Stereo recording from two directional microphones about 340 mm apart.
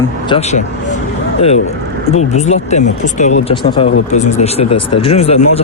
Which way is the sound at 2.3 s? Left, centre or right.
Centre.